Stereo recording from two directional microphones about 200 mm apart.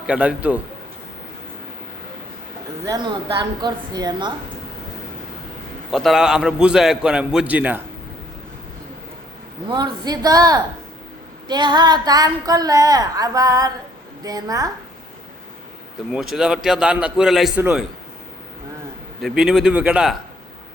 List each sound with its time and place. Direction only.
0.1 s a man's voice: 5° right (ahead or behind)
2.8 s speech: 20° right (ahead or behind)
5.9 s a man's voice: centre (ahead or behind)
9.6 s a man's voice: 20° right (ahead or behind)
16.1 s a man's voice: centre (ahead or behind)
19.2 s a man's voice: centre (ahead or behind)